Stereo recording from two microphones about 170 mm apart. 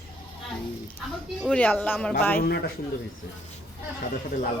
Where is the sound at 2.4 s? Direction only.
70° left (ahead or behind).